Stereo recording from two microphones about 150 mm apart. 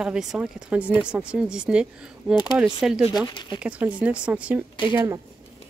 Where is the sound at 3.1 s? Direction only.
30° left (ahead or behind).